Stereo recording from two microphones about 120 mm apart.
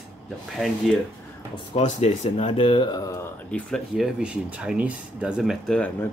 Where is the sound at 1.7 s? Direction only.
70° left (ahead or behind).